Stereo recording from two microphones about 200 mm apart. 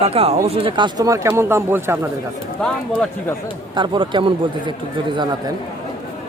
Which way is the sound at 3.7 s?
25° right (ahead or behind).